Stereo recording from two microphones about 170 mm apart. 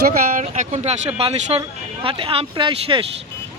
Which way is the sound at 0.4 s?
45° right (ahead or behind).